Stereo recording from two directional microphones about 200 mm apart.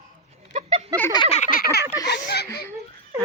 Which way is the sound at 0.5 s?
35° right (ahead or behind).